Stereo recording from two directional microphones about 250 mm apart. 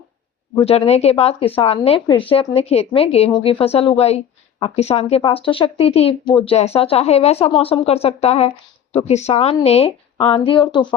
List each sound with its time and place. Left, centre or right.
0.6 s speech: left